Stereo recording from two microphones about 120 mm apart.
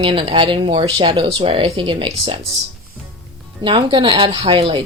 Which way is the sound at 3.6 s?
40° right (ahead or behind).